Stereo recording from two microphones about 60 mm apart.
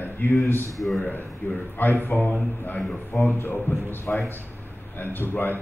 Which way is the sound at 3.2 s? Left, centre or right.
Left.